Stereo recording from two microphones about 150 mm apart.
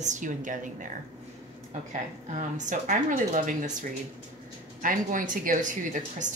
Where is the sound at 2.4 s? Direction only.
55° right (ahead or behind).